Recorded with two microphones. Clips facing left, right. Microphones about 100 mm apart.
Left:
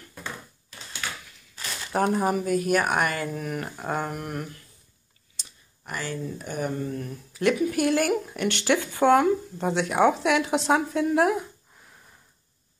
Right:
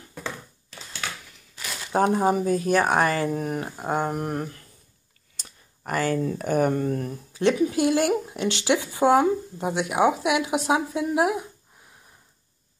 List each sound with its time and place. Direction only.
1.9 s speech: 20° right (ahead or behind); by 3.6 s 35° right (ahead or behind)
3.6 s speech: 20° right (ahead or behind)
4.1 s speech: 35° right (ahead or behind)
5.3 s speech: 50° right (ahead or behind)
7.3 s speech: 25° right (ahead or behind)